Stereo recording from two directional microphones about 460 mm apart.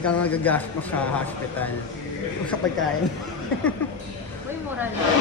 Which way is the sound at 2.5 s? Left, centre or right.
Left.